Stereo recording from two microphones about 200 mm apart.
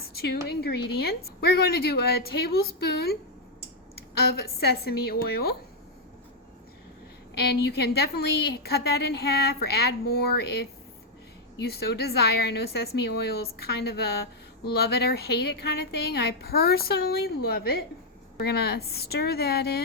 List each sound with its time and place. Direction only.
0.2 s a woman's voice: 50° left (ahead or behind)
4.4 s a woman's voice: 50° left (ahead or behind)
7.6 s a woman's voice: 55° left (ahead or behind)